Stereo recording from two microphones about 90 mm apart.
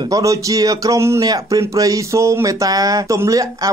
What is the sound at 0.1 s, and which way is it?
Speech, 40° right (ahead or behind).